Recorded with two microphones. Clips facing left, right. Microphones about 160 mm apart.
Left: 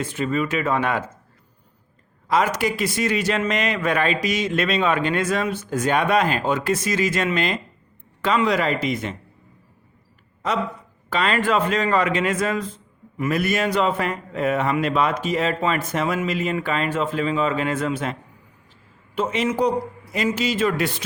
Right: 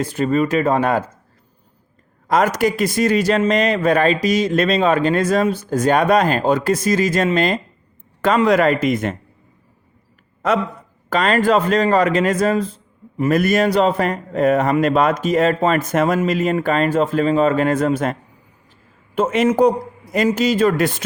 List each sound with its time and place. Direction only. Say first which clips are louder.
0.0 s a man's voice: right 6 dB; 40° right (ahead or behind)
2.2 s a man's voice: right 4 dB; 45° right (ahead or behind)
11.1 s a man's voice: right 5 dB; 45° right (ahead or behind)
13.3 s speech: right 6 dB; 40° right (ahead or behind)